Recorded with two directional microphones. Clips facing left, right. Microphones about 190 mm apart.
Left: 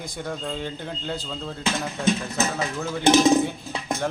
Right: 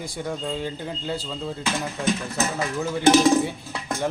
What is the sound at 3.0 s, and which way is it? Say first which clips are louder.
Speech: even; 20° left (ahead or behind).